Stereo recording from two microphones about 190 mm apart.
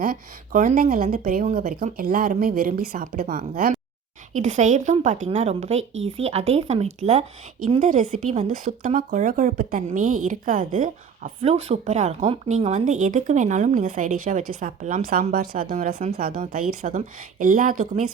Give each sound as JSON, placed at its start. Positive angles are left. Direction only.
{"t": 0.0, "sound": "a woman's voice", "side_deg": -45}
{"t": 4.4, "sound": "a woman's voice", "side_deg": -40}